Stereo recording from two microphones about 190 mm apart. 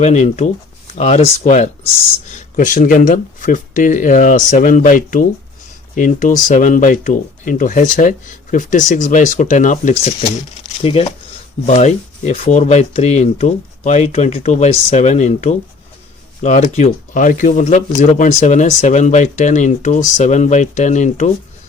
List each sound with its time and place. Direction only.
0.0 s speech: 35° left (ahead or behind)